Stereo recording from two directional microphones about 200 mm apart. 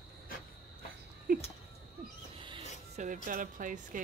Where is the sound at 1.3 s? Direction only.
40° right (ahead or behind).